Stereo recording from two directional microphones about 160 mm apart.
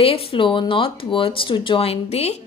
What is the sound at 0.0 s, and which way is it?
A woman's voice, 35° left (ahead or behind).